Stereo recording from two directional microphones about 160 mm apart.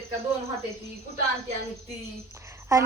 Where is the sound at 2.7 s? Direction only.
20° right (ahead or behind).